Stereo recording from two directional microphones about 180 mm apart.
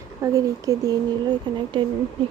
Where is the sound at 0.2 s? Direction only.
20° right (ahead or behind).